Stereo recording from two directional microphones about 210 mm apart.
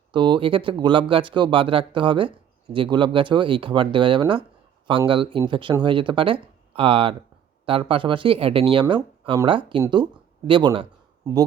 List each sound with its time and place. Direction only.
0.1 s speech: 20° right (ahead or behind)